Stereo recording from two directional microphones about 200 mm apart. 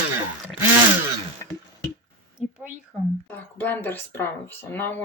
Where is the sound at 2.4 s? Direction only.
5° right (ahead or behind).